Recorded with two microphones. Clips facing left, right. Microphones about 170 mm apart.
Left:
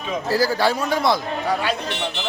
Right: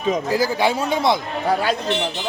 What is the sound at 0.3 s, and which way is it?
Speech, 20° right (ahead or behind).